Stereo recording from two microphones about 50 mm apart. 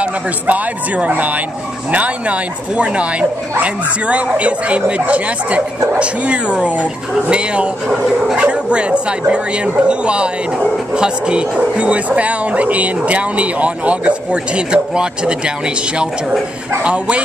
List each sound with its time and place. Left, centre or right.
0.0 s speech: right
16.8 s speech: right